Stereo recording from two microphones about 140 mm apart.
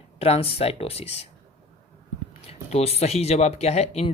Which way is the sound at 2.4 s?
45° left (ahead or behind).